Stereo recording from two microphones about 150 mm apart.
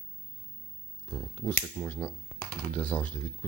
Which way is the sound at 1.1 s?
10° left (ahead or behind).